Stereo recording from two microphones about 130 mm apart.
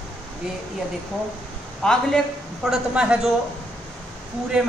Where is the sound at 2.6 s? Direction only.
5° right (ahead or behind).